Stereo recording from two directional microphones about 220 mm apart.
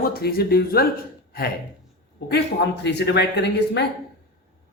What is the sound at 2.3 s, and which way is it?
A man's voice, 50° left (ahead or behind).